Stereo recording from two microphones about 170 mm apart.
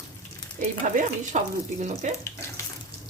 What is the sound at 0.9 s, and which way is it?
Speech, 45° right (ahead or behind).